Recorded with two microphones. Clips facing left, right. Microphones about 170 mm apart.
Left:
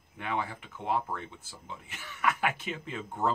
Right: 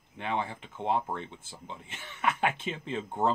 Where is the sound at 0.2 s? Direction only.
25° right (ahead or behind).